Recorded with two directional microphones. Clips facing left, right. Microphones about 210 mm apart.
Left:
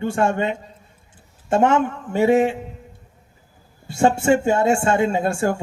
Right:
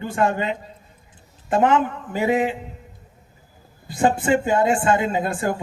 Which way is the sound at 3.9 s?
25° left (ahead or behind).